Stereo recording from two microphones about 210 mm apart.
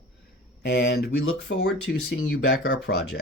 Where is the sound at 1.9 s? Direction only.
50° left (ahead or behind).